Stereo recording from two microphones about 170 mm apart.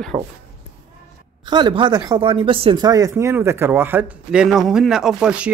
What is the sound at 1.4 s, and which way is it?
Speech, 25° right (ahead or behind).